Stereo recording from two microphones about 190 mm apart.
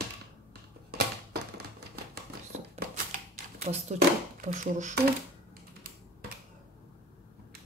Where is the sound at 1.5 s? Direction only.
55° right (ahead or behind).